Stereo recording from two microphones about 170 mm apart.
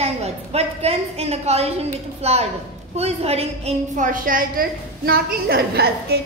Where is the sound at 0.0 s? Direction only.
40° right (ahead or behind).